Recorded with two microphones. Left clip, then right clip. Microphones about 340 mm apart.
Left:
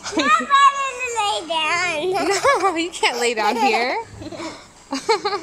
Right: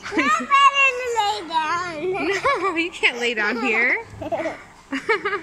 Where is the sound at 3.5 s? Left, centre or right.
Centre.